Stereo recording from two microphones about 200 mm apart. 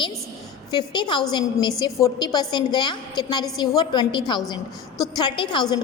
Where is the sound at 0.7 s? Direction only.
20° left (ahead or behind).